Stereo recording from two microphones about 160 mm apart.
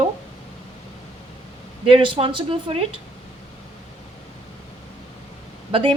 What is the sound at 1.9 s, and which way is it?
Speech, 35° right (ahead or behind).